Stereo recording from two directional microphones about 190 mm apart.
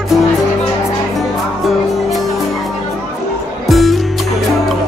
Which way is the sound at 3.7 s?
Centre (ahead or behind).